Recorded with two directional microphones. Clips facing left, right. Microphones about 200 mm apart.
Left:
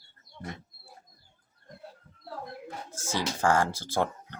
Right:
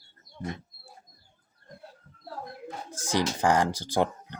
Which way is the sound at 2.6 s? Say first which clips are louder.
Right 1 dB; 15° right (ahead or behind).